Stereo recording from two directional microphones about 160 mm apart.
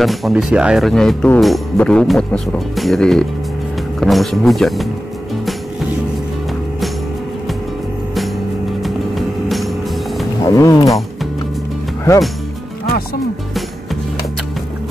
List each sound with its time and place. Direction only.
0.0 s speech: centre (ahead or behind)
8.8 s vehicle: centre (ahead or behind)
10.4 s music: 20° left (ahead or behind)